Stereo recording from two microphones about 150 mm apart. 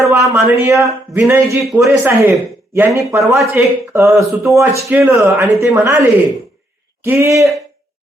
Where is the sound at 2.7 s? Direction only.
15° right (ahead or behind).